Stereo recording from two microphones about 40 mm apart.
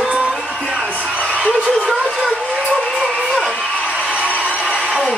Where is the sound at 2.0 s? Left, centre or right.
Centre.